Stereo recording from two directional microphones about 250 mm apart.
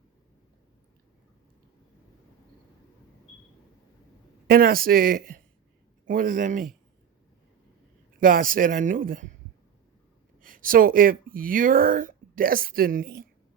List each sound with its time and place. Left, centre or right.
4.4 s speech: right
8.2 s speech: right
10.4 s speech: right